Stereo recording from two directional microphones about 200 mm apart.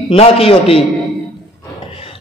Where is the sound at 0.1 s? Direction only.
30° left (ahead or behind).